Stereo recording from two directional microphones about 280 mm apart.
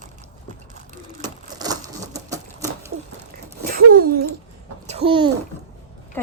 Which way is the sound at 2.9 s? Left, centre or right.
Right.